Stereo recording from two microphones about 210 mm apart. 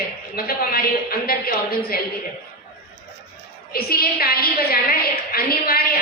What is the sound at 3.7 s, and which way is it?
A woman's voice, 45° left (ahead or behind).